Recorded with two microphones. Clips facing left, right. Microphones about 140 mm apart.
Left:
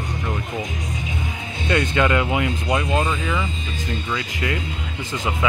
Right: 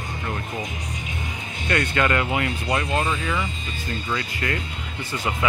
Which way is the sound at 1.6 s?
15° left (ahead or behind).